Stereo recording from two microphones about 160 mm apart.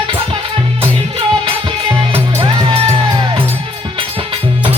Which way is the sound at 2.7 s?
35° right (ahead or behind).